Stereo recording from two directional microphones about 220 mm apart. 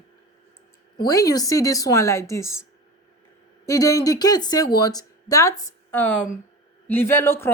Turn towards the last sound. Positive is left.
turn(degrees=10)  # may be behind; listen again after turning